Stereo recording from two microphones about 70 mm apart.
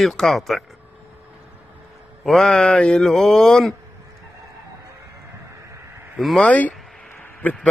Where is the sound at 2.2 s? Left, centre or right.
Centre.